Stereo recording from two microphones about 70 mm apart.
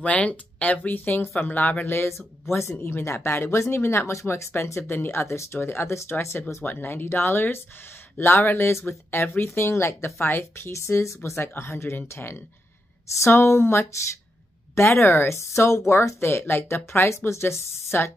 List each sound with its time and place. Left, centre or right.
0.0 s speech: centre; by 18.1 s left